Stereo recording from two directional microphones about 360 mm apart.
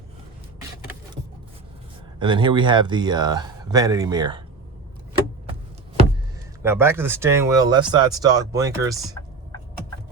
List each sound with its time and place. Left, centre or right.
2.1 s speech: centre
6.6 s speech: centre